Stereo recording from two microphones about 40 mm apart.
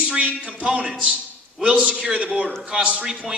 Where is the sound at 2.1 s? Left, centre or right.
Right.